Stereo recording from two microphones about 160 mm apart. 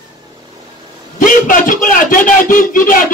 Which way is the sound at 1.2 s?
55° left (ahead or behind).